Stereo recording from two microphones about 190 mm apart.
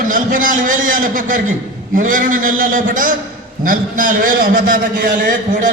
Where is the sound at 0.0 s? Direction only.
45° right (ahead or behind).